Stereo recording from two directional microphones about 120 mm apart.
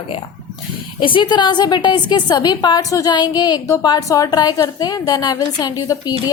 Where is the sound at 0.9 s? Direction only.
45° left (ahead or behind).